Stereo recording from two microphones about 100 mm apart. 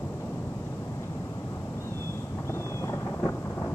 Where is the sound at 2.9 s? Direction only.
25° left (ahead or behind).